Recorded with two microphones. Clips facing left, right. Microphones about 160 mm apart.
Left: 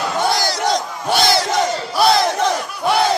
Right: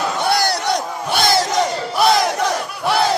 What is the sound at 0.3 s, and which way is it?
Battle cry, 60° right (ahead or behind).